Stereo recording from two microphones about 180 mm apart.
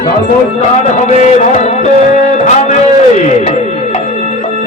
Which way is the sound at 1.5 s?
40° left (ahead or behind).